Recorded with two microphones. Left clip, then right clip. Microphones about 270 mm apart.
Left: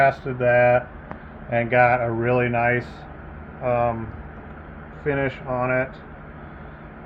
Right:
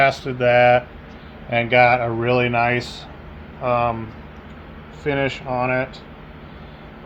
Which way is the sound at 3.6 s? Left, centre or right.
Right.